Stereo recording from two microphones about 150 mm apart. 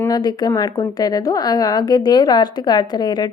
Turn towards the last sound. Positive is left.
turn(degrees=30)  # may be behind; listen again after turning